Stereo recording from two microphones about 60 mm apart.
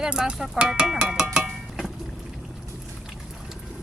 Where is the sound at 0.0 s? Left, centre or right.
Centre.